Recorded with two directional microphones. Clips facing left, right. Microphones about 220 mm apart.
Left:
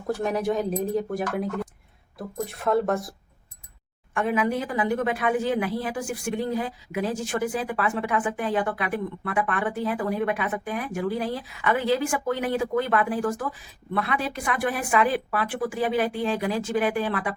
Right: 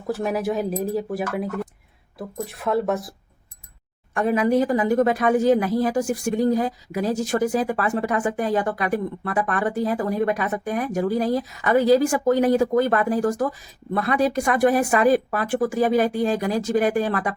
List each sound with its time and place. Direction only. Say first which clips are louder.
0.1 s speech: right 1 dB; 5° right (ahead or behind)
4.1 s speech: right 5 dB; 40° right (ahead or behind)